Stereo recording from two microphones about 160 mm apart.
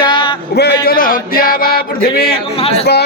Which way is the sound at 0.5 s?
80° left.